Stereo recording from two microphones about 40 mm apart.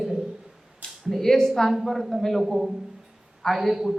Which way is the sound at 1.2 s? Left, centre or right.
Centre.